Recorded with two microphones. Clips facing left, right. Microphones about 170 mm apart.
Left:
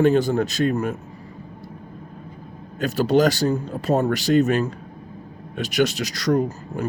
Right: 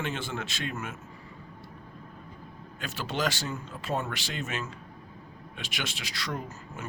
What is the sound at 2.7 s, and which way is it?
Speech, 40° left (ahead or behind).